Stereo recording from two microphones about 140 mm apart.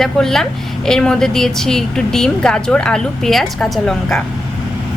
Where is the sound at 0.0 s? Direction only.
5° left (ahead or behind).